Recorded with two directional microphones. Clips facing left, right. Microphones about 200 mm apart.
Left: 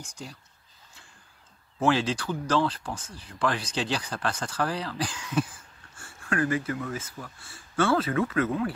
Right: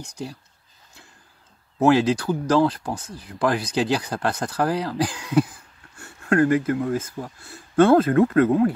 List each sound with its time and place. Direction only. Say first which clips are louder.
1.8 s speech: right 7 dB; 40° right (ahead or behind)
5.9 s speech: right 9 dB; 45° right (ahead or behind)